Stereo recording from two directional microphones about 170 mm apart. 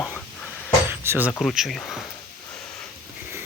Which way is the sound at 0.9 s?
15° right (ahead or behind).